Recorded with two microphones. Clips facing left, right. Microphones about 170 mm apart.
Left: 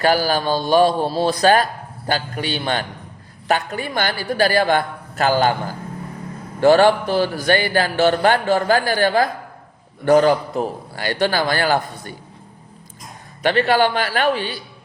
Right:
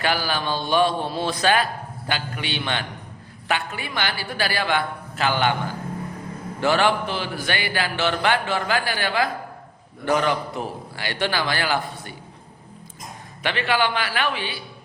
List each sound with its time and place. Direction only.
0.0 s a man's voice: 40° left (ahead or behind)
13.4 s a man's voice: 40° left (ahead or behind)